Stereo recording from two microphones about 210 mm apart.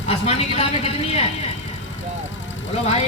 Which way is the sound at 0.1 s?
30° left (ahead or behind).